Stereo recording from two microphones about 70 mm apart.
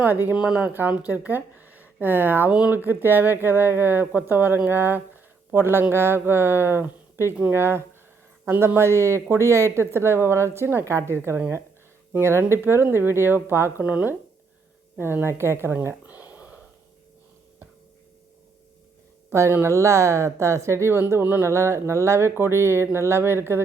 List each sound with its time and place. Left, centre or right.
0.0 s speech: right
13.8 s speech: right
16.0 s a sound: right
19.3 s a woman's voice: right
21.1 s speech: right
21.5 s speech: right